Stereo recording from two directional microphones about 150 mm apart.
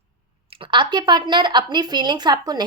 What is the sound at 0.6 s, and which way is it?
A woman's voice, 30° right (ahead or behind).